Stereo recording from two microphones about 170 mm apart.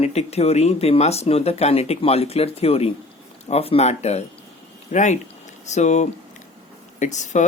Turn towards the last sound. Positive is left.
turn(degrees=45)  # may be behind; listen again after turning